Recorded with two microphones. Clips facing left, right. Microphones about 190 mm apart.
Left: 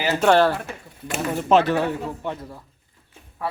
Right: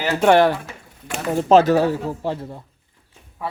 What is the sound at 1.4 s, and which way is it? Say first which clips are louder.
Speech: right 5 dB; 40° right (ahead or behind).